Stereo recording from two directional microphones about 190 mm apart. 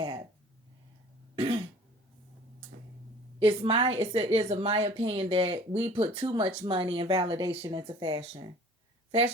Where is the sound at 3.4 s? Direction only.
30° right (ahead or behind).